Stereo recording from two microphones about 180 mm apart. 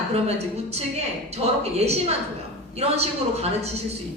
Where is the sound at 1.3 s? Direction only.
35° right (ahead or behind).